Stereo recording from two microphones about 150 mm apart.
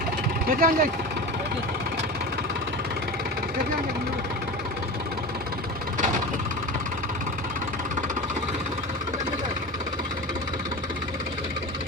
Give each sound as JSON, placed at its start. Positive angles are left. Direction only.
{"t": 0.5, "sound": "speech", "side_deg": -75}